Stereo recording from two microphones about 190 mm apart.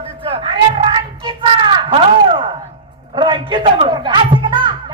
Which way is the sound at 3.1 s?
25° right (ahead or behind).